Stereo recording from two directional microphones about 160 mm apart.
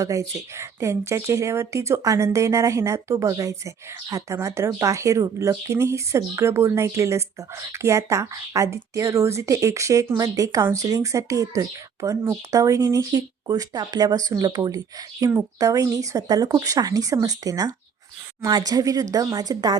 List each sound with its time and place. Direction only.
0.0 s speech: 20° right (ahead or behind)